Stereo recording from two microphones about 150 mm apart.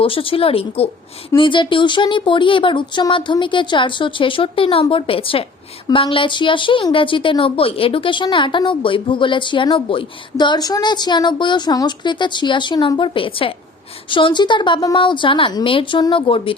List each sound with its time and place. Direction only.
0.0 s a woman's voice: 35° left (ahead or behind)